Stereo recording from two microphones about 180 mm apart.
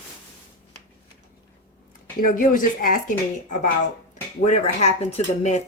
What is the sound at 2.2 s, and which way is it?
Speech, 50° left (ahead or behind).